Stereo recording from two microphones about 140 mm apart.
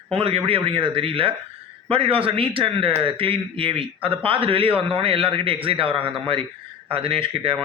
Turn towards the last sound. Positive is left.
turn(degrees=-40)  # may be behind; listen again after turning